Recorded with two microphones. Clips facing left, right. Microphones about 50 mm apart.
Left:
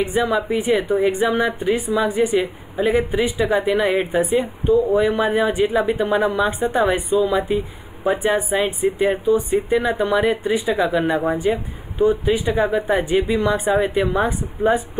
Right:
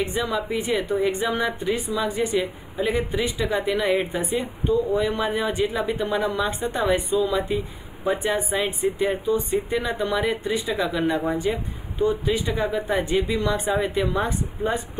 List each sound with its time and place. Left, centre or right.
0.0 s a woman's voice: centre